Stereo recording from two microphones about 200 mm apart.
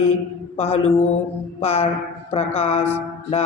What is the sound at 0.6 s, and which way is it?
Mantra, 30° left (ahead or behind).